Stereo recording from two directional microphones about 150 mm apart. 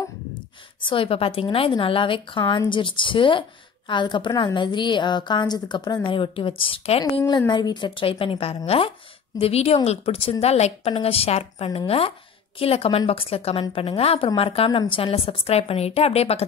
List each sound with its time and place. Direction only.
0.8 s a woman's voice: 35° left (ahead or behind)